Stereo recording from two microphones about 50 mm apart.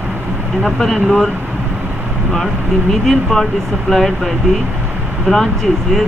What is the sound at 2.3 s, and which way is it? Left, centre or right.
Speech, centre.